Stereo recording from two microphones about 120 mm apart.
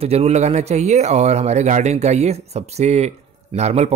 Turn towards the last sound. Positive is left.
turn(degrees=-65)  # may be behind; listen again after turning